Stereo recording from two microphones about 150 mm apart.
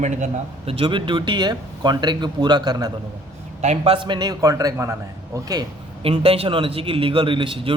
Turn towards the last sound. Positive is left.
turn(degrees=-35)  # may be behind; listen again after turning